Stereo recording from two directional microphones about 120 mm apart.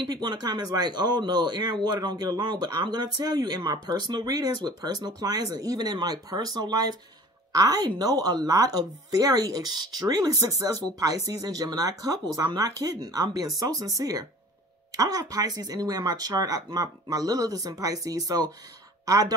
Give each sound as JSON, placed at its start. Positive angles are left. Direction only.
{"t": 0.1, "sound": "speech", "side_deg": -35}